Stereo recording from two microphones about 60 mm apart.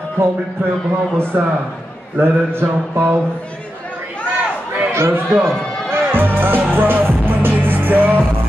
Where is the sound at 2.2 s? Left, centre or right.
Right.